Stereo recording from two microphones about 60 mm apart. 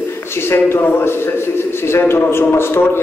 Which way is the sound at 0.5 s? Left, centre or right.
Left.